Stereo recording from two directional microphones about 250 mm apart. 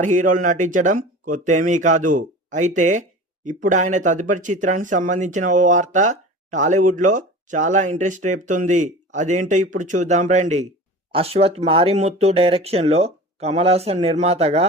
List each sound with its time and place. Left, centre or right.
0.0 s speech: right